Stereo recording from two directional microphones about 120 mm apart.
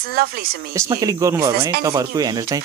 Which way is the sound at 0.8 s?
30° right (ahead or behind).